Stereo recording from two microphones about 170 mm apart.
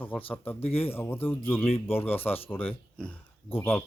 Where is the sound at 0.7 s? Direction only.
35° left (ahead or behind).